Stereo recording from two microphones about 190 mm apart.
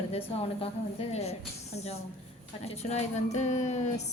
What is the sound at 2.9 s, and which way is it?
Female singing, 35° left (ahead or behind).